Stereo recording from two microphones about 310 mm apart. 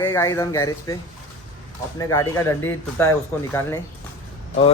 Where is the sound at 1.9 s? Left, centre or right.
Centre.